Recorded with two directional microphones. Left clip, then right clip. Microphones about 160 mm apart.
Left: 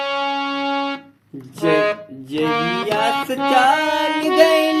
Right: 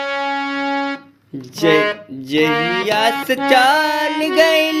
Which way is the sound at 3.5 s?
60° right (ahead or behind).